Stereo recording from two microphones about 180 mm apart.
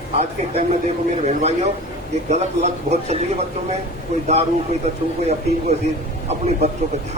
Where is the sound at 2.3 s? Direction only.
40° right (ahead or behind).